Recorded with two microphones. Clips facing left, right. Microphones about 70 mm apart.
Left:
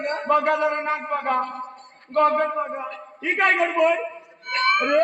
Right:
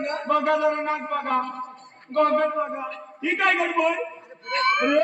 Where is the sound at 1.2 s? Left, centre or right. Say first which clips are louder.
Left 1 dB; left.